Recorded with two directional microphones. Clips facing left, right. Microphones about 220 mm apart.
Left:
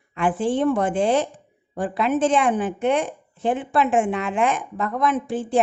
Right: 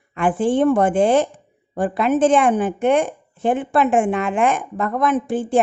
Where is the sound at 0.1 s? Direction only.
50° right (ahead or behind).